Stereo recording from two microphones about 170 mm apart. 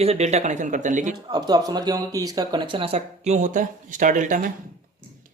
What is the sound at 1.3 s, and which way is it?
Speech, 25° right (ahead or behind).